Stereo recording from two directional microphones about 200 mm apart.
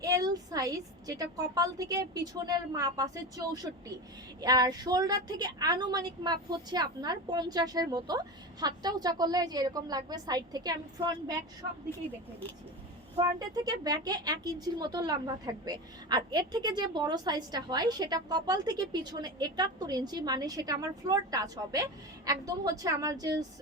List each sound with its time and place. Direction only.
0.0 s a woman's voice: 20° right (ahead or behind)
13.1 s a woman's voice: 20° right (ahead or behind)